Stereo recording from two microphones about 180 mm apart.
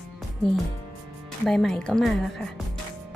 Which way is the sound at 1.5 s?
5° left (ahead or behind).